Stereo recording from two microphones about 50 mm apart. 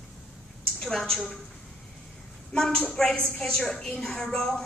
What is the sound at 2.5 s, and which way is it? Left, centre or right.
A woman's voice, centre.